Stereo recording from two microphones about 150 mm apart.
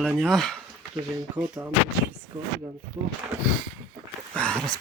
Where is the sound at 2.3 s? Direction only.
45° right (ahead or behind).